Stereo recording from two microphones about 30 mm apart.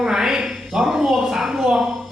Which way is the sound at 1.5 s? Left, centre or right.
Right.